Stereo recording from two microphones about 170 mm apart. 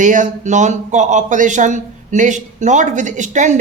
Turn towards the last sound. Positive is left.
turn(degrees=-45)  # may be behind; listen again after turning